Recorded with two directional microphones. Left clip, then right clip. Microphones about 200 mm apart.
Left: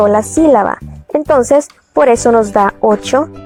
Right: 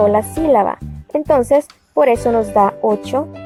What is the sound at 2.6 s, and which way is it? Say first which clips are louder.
Speech: left 3 dB; 35° left (ahead or behind).